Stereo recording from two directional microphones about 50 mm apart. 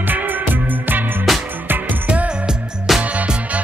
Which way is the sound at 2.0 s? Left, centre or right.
Right.